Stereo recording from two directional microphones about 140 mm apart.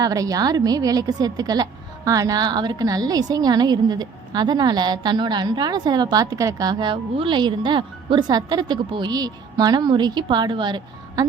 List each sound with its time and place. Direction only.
0.0 s a woman's voice: 25° right (ahead or behind)